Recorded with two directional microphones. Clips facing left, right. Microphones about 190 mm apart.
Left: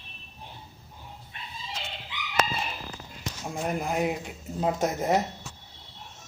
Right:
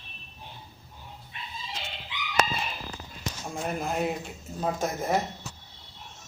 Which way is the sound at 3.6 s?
15° left (ahead or behind).